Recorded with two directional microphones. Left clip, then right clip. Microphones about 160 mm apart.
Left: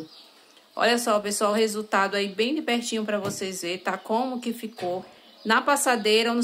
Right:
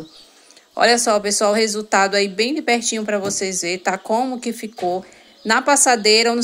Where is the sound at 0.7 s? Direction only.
25° right (ahead or behind).